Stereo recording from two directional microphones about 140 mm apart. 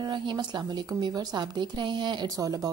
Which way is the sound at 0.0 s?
35° right (ahead or behind).